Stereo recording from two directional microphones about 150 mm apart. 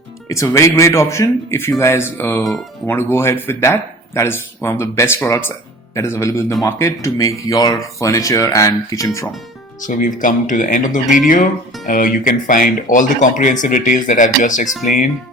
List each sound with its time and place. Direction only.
0.3 s speech: 20° left (ahead or behind)
9.8 s speech: 60° left (ahead or behind)